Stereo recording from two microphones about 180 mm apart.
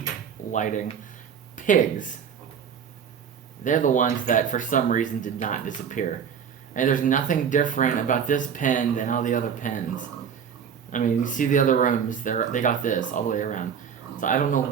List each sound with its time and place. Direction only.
0.5 s speech: 45° left (ahead or behind)
3.6 s speech: 45° left (ahead or behind)